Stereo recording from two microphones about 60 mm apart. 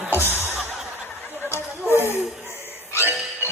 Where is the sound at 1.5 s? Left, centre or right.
Left.